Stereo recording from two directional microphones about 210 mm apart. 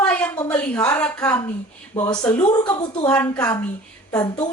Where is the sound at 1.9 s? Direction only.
20° left (ahead or behind).